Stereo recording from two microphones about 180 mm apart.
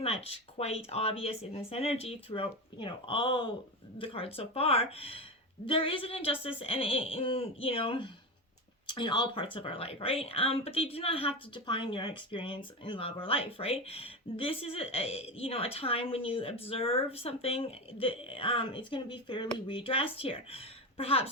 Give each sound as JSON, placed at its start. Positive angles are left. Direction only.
{"t": 0.0, "sound": "a woman's voice", "side_deg": 35}